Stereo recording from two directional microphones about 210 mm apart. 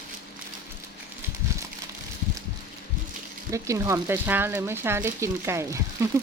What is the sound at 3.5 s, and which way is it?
Speech, 15° right (ahead or behind).